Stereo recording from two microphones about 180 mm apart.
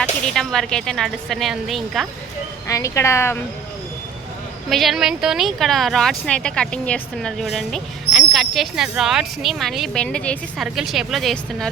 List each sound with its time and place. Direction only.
0.0 s speech: 5° left (ahead or behind)
2.6 s a woman's voice: 15° left (ahead or behind)
4.7 s speech: centre (ahead or behind)